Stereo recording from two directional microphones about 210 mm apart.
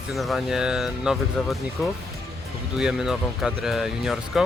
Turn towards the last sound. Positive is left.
turn(degrees=0)  # may be behind; listen again after turning